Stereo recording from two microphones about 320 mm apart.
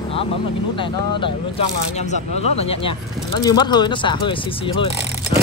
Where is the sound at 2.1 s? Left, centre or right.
Centre.